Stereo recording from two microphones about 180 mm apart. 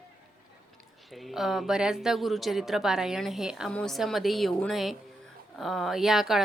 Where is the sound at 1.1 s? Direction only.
Centre (ahead or behind).